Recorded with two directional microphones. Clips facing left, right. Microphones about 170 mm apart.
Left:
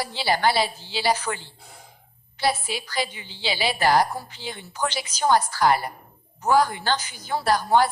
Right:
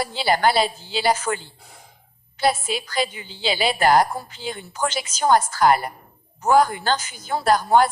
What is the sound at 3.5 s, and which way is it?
A woman's voice, 50° right (ahead or behind).